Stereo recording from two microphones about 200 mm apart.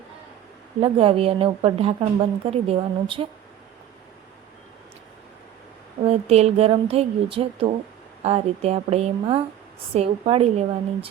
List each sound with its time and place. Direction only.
0.8 s speech: 30° right (ahead or behind)
6.1 s a woman's voice: 30° right (ahead or behind)